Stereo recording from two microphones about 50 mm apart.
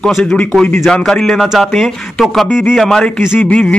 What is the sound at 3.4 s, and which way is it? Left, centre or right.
Speech, left.